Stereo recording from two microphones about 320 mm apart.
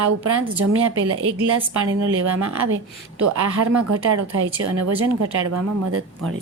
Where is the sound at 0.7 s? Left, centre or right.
Right.